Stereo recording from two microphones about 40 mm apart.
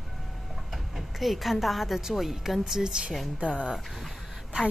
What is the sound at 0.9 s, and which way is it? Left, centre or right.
A woman's voice, centre.